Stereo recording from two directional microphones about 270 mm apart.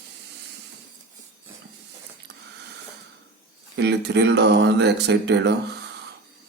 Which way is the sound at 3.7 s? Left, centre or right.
Right.